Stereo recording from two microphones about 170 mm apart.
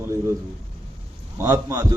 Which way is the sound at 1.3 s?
20° right (ahead or behind).